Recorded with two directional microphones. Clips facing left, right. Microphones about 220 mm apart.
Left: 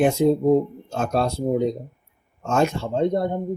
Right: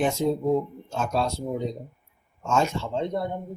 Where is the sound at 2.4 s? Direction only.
55° left (ahead or behind).